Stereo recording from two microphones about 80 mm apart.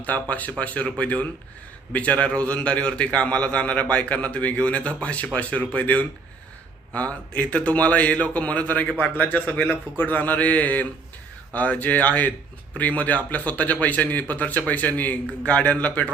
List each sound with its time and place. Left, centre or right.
0.0 s a man's voice: centre